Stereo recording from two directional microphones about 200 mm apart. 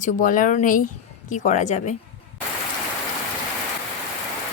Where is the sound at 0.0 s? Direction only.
40° left (ahead or behind).